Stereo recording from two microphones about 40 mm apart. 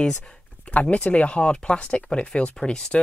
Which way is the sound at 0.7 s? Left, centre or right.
Left.